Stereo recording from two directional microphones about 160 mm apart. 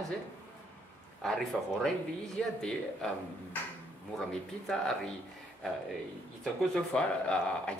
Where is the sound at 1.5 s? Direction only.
5° right (ahead or behind).